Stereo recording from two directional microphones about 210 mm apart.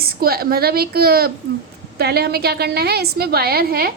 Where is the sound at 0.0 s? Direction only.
45° right (ahead or behind).